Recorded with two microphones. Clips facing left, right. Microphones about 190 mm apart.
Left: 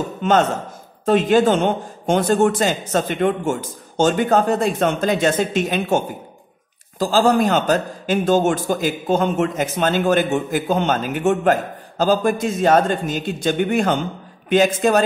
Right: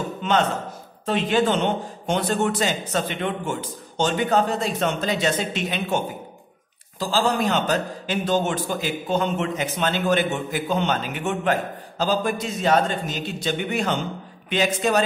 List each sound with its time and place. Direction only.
0.2 s a man's voice: 45° left (ahead or behind)